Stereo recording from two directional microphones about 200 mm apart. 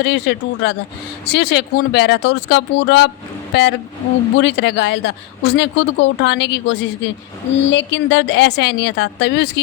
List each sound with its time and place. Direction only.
0.0 s a woman's voice: 60° left (ahead or behind)